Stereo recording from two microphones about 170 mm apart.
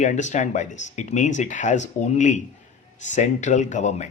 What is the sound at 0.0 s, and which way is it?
Speech, 45° left (ahead or behind).